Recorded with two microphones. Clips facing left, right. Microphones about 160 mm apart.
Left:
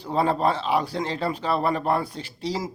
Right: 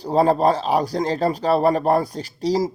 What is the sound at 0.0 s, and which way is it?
Speech, 40° right (ahead or behind).